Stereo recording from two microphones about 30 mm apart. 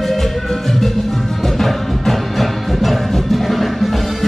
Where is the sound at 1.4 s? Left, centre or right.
Centre.